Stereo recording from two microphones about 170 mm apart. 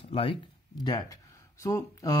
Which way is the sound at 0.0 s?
30° left (ahead or behind).